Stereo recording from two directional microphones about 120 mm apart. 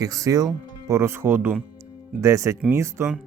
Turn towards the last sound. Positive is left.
turn(degrees=-25)  # may be behind; listen again after turning